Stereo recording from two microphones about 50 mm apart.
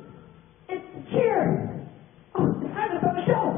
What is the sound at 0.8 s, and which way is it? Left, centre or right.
Music, centre.